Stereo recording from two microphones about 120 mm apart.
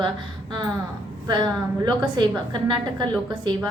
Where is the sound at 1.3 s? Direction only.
40° right (ahead or behind).